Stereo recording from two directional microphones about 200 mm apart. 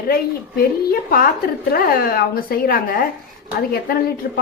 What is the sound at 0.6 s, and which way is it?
A woman's voice, 45° left (ahead or behind).